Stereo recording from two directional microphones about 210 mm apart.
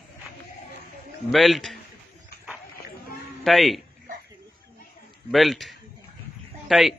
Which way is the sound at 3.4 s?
Centre (ahead or behind).